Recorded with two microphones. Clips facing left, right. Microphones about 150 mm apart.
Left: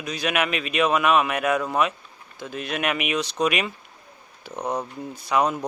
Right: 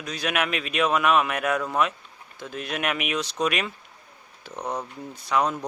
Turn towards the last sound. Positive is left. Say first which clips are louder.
# left 2 dB
turn(degrees=10)  # may be behind; listen again after turning